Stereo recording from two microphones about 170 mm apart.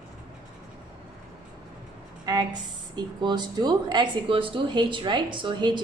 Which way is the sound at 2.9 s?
25° right (ahead or behind).